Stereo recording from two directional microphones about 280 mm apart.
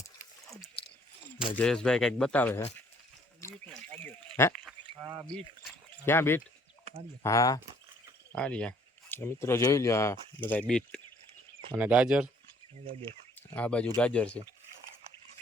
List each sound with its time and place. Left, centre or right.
1.5 s speech: centre
3.4 s a sound: centre
4.6 s a sound: centre
5.3 s speech: centre
12.8 s speech: centre
13.5 s speech: centre